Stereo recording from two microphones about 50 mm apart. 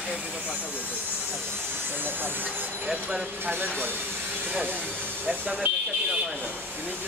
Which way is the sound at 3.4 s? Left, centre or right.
Right.